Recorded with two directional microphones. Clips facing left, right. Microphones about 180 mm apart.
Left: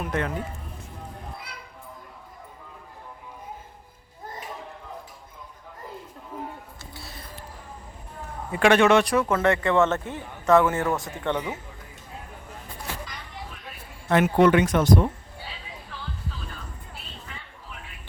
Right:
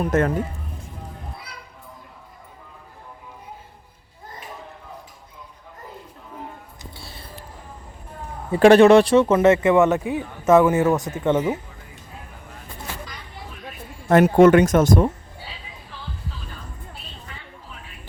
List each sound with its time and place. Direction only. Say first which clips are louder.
0.0 s speech: right 8 dB; 40° right (ahead or behind)
6.9 s a sound: left 2 dB; 30° right (ahead or behind)
8.5 s speech: right 7 dB; 35° right (ahead or behind)
14.1 s speech: right 6 dB; 45° right (ahead or behind)